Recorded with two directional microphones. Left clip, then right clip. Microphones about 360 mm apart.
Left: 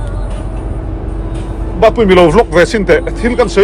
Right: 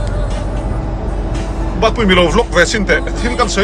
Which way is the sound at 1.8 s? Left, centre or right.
Centre.